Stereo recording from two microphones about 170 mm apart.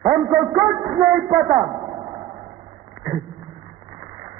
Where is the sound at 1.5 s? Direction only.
20° right (ahead or behind).